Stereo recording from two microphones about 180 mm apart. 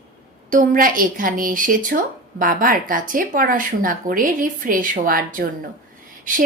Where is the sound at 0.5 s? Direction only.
50° right (ahead or behind).